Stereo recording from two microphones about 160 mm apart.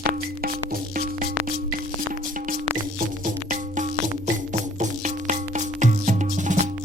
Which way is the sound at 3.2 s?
55° right (ahead or behind).